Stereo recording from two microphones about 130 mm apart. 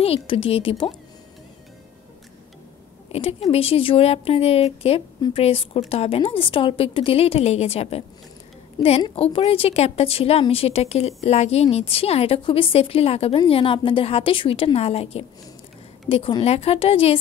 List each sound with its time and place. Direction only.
0.0 s a woman's voice: 45° left (ahead or behind)
3.1 s a woman's voice: 50° left (ahead or behind)
8.8 s a woman's voice: 30° left (ahead or behind)
9.1 s a woman's voice: 50° left (ahead or behind)